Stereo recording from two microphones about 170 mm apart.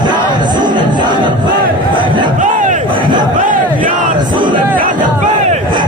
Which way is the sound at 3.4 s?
50° right (ahead or behind).